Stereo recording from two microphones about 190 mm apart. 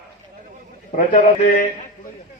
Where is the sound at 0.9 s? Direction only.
45° left (ahead or behind).